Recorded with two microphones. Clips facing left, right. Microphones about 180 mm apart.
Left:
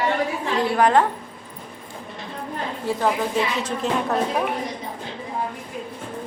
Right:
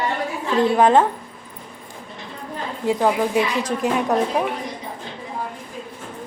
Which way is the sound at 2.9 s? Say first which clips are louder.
Right 4 dB; 15° right (ahead or behind).